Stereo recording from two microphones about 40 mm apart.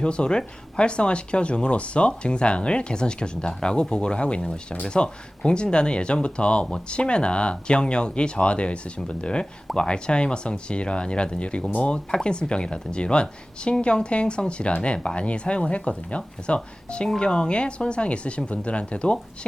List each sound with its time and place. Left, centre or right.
0.0 s speech: left
5.0 s speech: left